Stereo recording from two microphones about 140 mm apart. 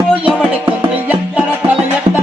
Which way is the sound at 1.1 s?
10° right (ahead or behind).